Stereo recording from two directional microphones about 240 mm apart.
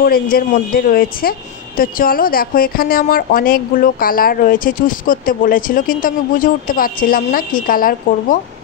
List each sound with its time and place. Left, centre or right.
0.0 s a woman's voice: left